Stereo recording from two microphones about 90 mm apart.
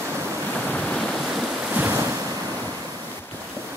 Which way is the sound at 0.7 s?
15° left (ahead or behind).